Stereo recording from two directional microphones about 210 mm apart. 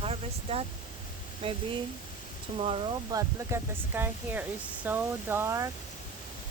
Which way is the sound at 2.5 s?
30° right (ahead or behind).